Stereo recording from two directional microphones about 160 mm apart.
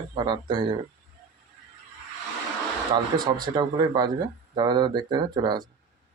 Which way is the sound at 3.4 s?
25° right (ahead or behind).